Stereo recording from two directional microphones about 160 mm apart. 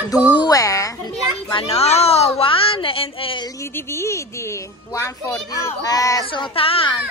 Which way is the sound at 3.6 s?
15° left (ahead or behind).